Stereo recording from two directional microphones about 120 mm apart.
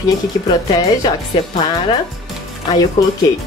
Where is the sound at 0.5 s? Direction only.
35° left (ahead or behind).